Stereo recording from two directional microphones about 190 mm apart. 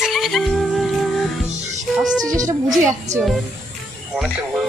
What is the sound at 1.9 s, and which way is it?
Speech, centre (ahead or behind).